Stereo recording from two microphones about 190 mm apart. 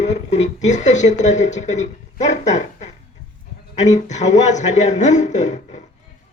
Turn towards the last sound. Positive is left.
turn(degrees=40)  # may be behind; listen again after turning